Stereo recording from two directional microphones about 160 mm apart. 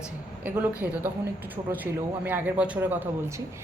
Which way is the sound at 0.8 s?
15° right (ahead or behind).